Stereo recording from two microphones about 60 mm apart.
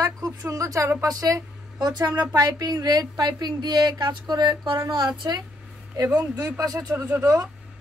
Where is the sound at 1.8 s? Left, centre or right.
Right.